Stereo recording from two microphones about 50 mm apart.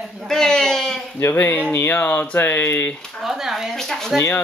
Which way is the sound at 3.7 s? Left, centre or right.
Centre.